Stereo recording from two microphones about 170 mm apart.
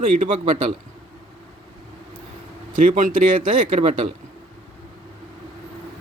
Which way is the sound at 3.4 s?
35° right (ahead or behind).